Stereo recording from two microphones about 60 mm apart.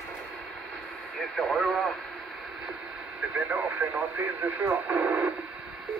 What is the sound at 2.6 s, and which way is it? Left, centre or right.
Radio, centre.